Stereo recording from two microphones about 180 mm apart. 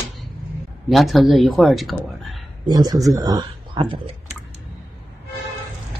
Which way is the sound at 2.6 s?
20° right (ahead or behind).